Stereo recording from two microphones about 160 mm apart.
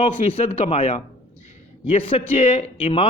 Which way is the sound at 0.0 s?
40° left (ahead or behind).